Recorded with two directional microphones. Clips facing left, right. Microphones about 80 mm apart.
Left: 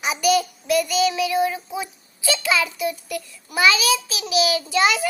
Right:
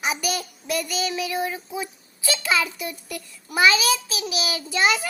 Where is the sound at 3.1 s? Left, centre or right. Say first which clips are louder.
Left 5 dB; right.